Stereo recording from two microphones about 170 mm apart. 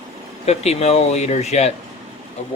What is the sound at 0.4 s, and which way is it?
Speech, 40° left (ahead or behind).